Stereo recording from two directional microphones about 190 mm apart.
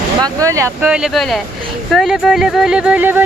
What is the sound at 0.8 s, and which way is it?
Speech, 5° right (ahead or behind).